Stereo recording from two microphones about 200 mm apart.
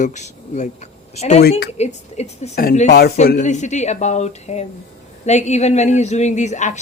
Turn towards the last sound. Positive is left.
turn(degrees=35)  # may be behind; listen again after turning